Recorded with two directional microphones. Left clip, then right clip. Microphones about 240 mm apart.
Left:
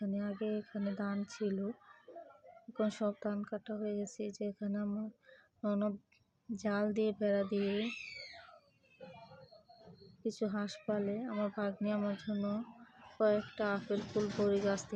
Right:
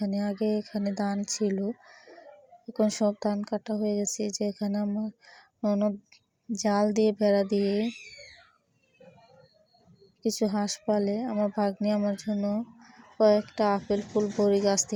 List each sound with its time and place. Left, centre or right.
0.0 s speech: right
2.7 s speech: right
10.2 s speech: right